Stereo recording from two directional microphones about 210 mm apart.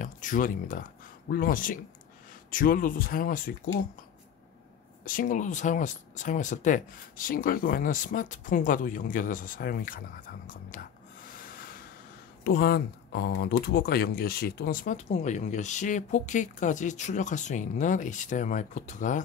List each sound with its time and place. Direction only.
0.0 s speech: 40° left (ahead or behind)
5.0 s speech: 40° left (ahead or behind)
11.2 s rub: 40° left (ahead or behind)
12.4 s speech: 50° left (ahead or behind)